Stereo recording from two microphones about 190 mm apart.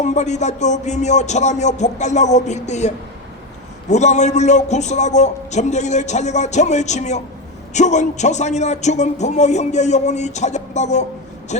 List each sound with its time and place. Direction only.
0.0 s a man's voice: 40° left (ahead or behind)